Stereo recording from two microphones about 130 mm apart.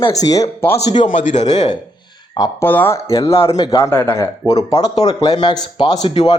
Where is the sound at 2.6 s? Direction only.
15° left (ahead or behind).